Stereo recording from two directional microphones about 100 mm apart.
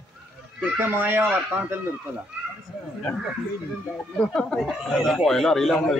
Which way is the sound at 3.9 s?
10° left (ahead or behind).